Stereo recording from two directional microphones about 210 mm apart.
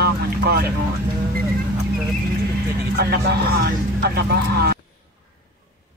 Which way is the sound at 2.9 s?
50° right (ahead or behind).